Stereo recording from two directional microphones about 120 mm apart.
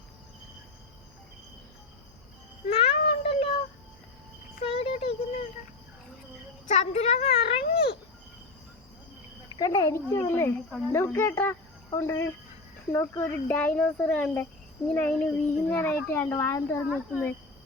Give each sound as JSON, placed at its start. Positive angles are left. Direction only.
{"t": 2.6, "sound": "child singing", "side_deg": 55}
{"t": 4.6, "sound": "a sound", "side_deg": 55}
{"t": 6.7, "sound": "speech", "side_deg": 65}
{"t": 9.6, "sound": "a child's voice", "side_deg": 30}